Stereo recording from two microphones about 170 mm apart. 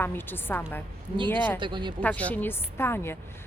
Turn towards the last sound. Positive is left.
turn(degrees=15)  # may be behind; listen again after turning